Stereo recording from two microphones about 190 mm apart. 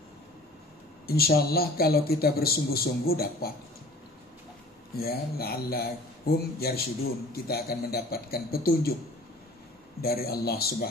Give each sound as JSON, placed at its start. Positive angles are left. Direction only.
{"t": 1.0, "sound": "a man's voice", "side_deg": 55}
{"t": 5.0, "sound": "a man's voice", "side_deg": 55}
{"t": 10.0, "sound": "a man's voice", "side_deg": 55}